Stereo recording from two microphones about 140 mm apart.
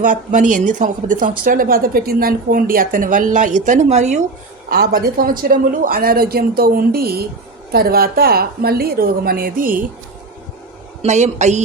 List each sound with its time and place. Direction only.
0.0 s speech: 70° right (ahead or behind)
1.5 s speech: 85° right; by 4.2 s 55° right (ahead or behind)
5.0 s a woman's voice: 90° right
11.0 s speech: 55° right (ahead or behind)